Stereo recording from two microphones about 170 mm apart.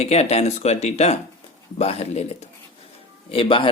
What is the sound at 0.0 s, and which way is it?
A man's voice, 40° left (ahead or behind).